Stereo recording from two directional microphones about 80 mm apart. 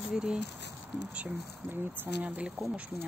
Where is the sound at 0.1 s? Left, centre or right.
Centre.